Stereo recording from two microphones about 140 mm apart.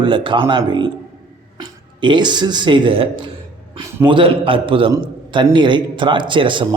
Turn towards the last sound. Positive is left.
turn(degrees=-35)  # may be behind; listen again after turning